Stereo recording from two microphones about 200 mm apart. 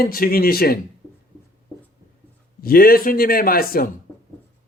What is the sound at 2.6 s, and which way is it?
Speech, 50° left (ahead or behind).